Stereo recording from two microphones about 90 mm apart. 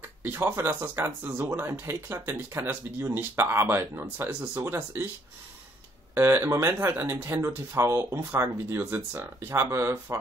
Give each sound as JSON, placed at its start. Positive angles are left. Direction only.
{"t": 0.2, "sound": "speech", "side_deg": -25}
{"t": 6.1, "sound": "speech", "side_deg": -25}